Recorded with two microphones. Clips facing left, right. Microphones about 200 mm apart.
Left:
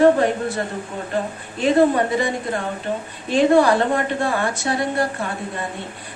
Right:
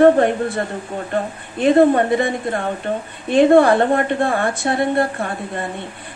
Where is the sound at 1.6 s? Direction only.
55° right (ahead or behind).